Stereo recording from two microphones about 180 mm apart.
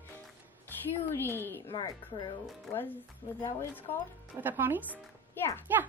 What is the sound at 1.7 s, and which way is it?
Speech, 25° left (ahead or behind).